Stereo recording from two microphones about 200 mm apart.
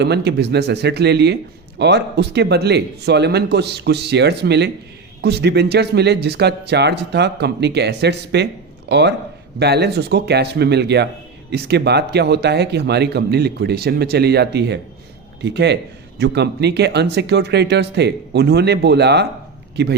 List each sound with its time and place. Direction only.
0.0 s a man's voice: 55° right (ahead or behind)